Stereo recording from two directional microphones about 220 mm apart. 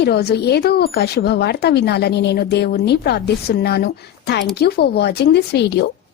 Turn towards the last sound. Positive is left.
turn(degrees=50)  # may be behind; listen again after turning